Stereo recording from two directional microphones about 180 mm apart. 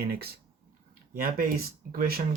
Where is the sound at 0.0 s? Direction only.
60° right (ahead or behind).